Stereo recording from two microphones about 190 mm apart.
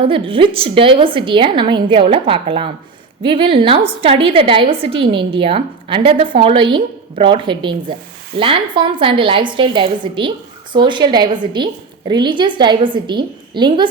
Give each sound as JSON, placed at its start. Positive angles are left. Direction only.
{"t": 0.0, "sound": "a woman's voice", "side_deg": -25}